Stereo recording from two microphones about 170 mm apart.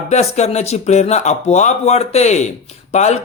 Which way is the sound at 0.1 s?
40° left (ahead or behind).